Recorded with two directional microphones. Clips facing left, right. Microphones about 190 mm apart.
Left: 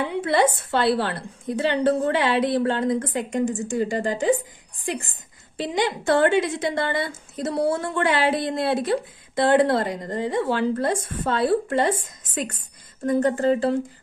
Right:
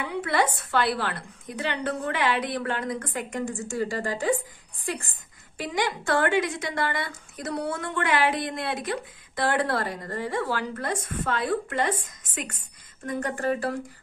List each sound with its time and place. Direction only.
0.0 s a woman's voice: 25° left (ahead or behind)
5.6 s a woman's voice: 25° left (ahead or behind)
13.0 s a woman's voice: 30° left (ahead or behind)